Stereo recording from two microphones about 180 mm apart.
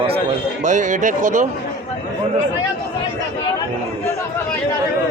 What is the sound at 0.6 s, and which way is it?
Speech, 45° right (ahead or behind).